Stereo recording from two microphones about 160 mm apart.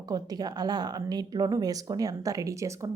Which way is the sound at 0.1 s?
25° right (ahead or behind).